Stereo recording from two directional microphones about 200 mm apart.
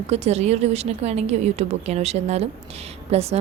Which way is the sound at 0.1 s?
35° right (ahead or behind).